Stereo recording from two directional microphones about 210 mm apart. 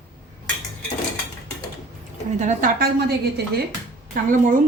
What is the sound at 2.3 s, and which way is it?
Speech, 35° right (ahead or behind).